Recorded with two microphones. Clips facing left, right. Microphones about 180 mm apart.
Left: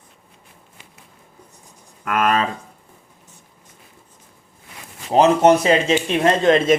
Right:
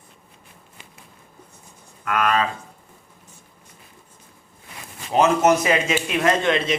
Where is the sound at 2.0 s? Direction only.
45° left (ahead or behind).